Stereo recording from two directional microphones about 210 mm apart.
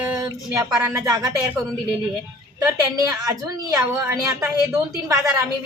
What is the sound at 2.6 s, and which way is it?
A woman's voice, 15° right (ahead or behind).